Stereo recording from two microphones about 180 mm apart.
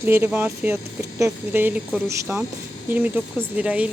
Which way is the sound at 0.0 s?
10° right (ahead or behind).